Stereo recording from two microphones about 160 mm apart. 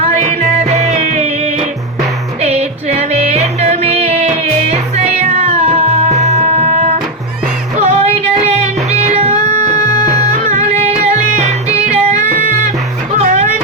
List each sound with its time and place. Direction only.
0.0 s music: 40° right (ahead or behind)
2.4 s music: 40° right (ahead or behind)
13.1 s music: 50° right (ahead or behind)